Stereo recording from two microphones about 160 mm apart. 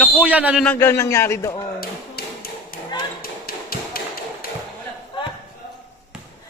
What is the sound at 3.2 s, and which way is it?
Tap, 70° left (ahead or behind).